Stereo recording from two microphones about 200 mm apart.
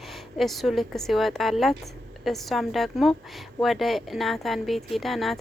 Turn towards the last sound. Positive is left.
turn(degrees=0)  # may be behind; listen again after turning